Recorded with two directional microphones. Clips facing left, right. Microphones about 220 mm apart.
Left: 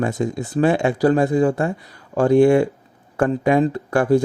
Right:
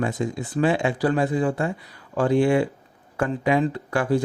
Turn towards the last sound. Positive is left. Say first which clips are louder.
# left 6 dB
turn(degrees=45)  # may be behind; listen again after turning